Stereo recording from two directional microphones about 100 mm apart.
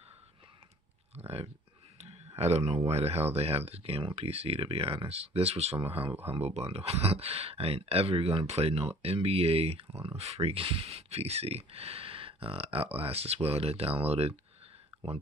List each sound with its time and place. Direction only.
1.1 s a sound: 90° right
2.0 s clicking: 90° right
2.9 s speech: 90° right
5.8 s speech: 60° right (ahead or behind)
6.3 s speech: 90° right